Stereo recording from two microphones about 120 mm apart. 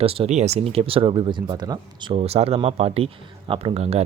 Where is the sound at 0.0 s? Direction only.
50° right (ahead or behind).